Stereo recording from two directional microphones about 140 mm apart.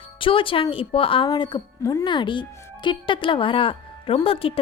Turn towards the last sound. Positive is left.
turn(degrees=40)  # may be behind; listen again after turning